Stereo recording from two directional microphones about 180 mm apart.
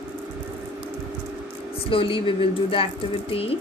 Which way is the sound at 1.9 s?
30° left (ahead or behind).